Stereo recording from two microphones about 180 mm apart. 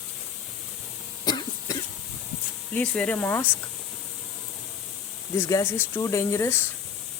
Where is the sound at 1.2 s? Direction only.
20° left (ahead or behind).